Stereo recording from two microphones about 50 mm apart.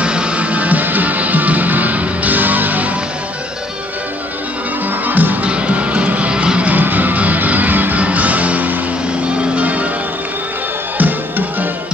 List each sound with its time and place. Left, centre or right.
0.0 s music: centre; by 2.9 s right
5.0 s music: right; by 6.7 s centre
6.7 s music: right
11.0 s music: right